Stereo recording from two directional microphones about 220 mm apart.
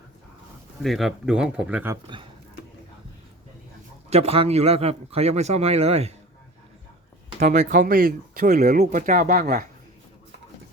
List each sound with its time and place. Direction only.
0.8 s speech: centre (ahead or behind)
4.1 s a man's voice: 30° right (ahead or behind)
7.3 s speech: 30° right (ahead or behind)